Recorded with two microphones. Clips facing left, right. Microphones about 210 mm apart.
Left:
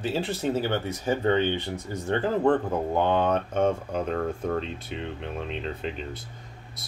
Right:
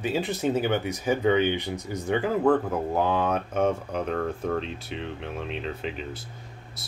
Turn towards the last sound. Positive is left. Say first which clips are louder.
# even
turn(degrees=0)  # may be behind; listen again after turning